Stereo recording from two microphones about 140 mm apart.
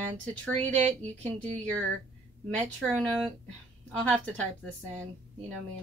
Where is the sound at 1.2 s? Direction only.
10° left (ahead or behind).